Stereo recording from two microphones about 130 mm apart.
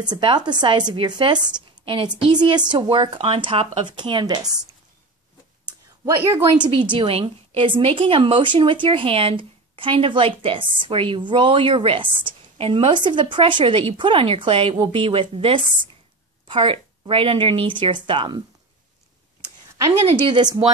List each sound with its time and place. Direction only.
0.0 s a woman's voice: 35° right (ahead or behind)
6.3 s a woman's voice: 40° right (ahead or behind)
20.2 s a woman's voice: 35° right (ahead or behind)